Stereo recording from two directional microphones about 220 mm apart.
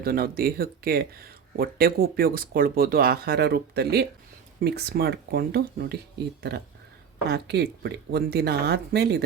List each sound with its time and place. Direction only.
0.0 s speech: 40° right (ahead or behind)
7.3 s speech: 50° right (ahead or behind)